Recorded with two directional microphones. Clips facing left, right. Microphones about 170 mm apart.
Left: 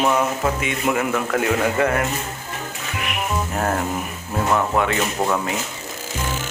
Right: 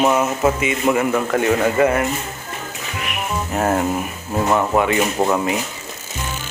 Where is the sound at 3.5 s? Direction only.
10° right (ahead or behind).